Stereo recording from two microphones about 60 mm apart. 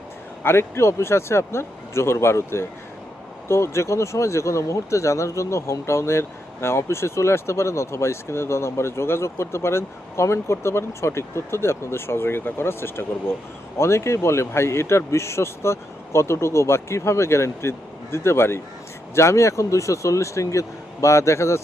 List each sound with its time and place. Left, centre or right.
0.4 s speech: left
13.7 s speech: left